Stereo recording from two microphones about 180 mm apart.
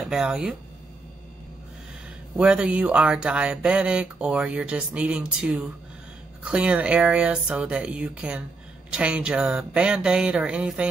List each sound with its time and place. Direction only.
0.1 s speech: 5° right (ahead or behind)
2.3 s speech: 5° right (ahead or behind)